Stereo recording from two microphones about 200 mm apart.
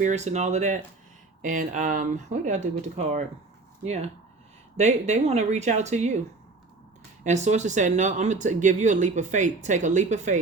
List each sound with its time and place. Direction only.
0.0 s speech: 35° right (ahead or behind)
7.3 s speech: 35° right (ahead or behind)